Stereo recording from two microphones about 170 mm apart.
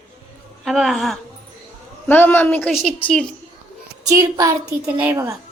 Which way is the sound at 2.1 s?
10° left (ahead or behind).